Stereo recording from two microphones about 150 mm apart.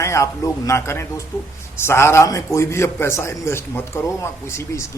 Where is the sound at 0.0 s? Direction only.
20° left (ahead or behind).